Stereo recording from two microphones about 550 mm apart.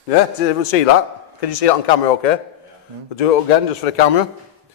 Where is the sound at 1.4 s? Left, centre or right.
Left.